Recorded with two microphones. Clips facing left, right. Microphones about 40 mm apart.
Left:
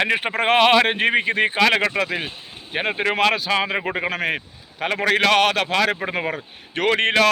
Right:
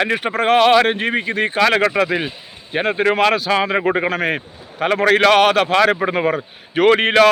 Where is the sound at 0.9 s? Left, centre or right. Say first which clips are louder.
Even; left.